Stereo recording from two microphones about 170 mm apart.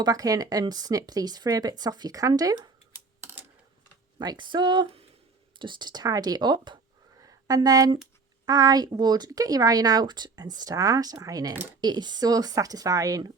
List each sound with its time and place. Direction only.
0.0 s a woman's voice: 20° right (ahead or behind)
4.2 s a woman's voice: 25° right (ahead or behind)
7.2 s a sound: 20° right (ahead or behind)
8.4 s a woman's voice: 20° right (ahead or behind)